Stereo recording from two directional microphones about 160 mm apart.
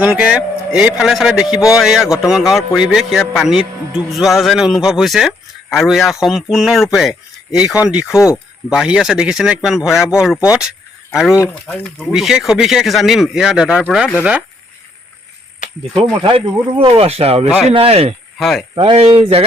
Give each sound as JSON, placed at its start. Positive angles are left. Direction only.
{"t": 0.0, "sound": "speech", "side_deg": -10}
{"t": 11.3, "sound": "speech", "side_deg": 10}
{"t": 16.2, "sound": "speech", "side_deg": -35}
{"t": 18.3, "sound": "speech", "side_deg": 0}
{"t": 18.7, "sound": "speech", "side_deg": -35}